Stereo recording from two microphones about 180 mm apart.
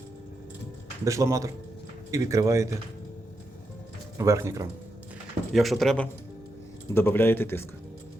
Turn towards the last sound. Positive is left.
turn(degrees=10)  # may be behind; listen again after turning